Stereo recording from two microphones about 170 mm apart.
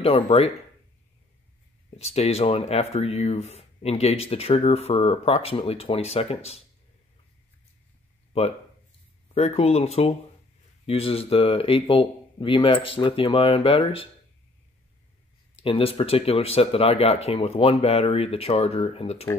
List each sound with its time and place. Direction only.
0.0 s speech: 35° left (ahead or behind)
2.0 s speech: 40° left (ahead or behind)
9.3 s speech: 35° left (ahead or behind)
15.6 s speech: 35° left (ahead or behind)